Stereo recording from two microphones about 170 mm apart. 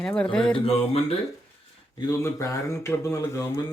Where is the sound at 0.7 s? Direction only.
35° left (ahead or behind).